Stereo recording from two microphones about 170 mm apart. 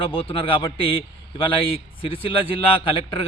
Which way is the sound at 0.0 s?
30° left (ahead or behind).